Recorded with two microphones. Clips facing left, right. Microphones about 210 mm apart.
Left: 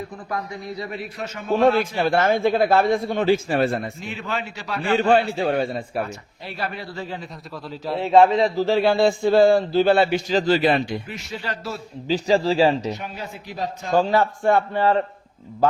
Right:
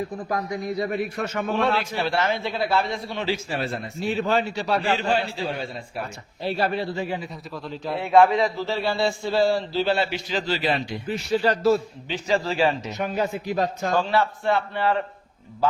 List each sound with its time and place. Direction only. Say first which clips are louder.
0.3 s a man's voice: right 1 dB; 35° right (ahead or behind)
0.9 s a man's voice: right 4 dB; 50° right (ahead or behind)
1.5 s a man's voice: left 8 dB; 45° left (ahead or behind)
4.0 s a man's voice: right 6 dB; 35° right (ahead or behind)
4.9 s a man's voice: left 6 dB; 55° left (ahead or behind)
6.4 s a man's voice: right 7 dB; 30° right (ahead or behind)
6.9 s a man's voice: right 3 dB; 15° right (ahead or behind)
7.2 s a man's voice: right 1 dB; centre (ahead or behind)
8.0 s a man's voice: left 2 dB; 25° left (ahead or behind)
8.5 s a man's voice: left 7 dB; 50° left (ahead or behind)
11.1 s a man's voice: right 9 dB; 40° right (ahead or behind)
12.0 s a man's voice: left 8 dB; 35° left (ahead or behind)
13.0 s speech: right 8 dB; 65° right (ahead or behind)
14.0 s a man's voice: left 4 dB; 40° left (ahead or behind)